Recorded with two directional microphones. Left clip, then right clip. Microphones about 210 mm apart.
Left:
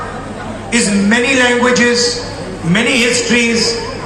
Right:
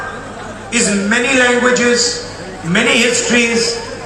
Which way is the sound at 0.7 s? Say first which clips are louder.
Left 1 dB; 15° left (ahead or behind).